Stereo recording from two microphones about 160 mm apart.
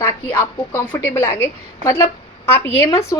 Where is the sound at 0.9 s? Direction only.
15° left (ahead or behind).